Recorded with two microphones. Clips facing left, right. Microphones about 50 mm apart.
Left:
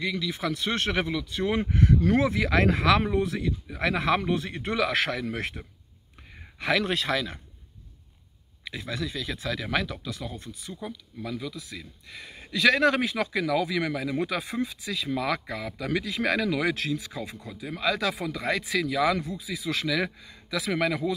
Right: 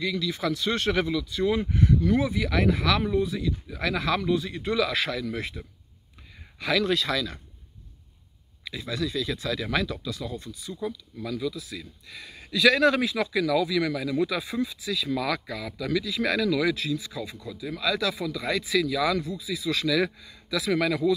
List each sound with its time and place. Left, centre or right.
0.0 s speech: left
3.7 s speech: left
6.6 s speech: left
8.6 s a man's voice: left
11.1 s a man's voice: centre
16.7 s speech: left
17.4 s a man's voice: left